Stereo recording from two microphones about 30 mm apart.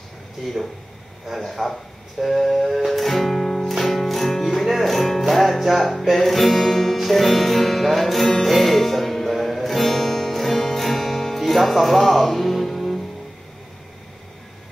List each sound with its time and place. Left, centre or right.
1.5 s speech: centre
2.4 s music: centre